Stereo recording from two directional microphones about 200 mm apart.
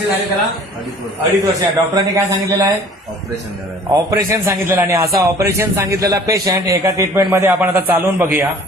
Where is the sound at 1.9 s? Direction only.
15° right (ahead or behind).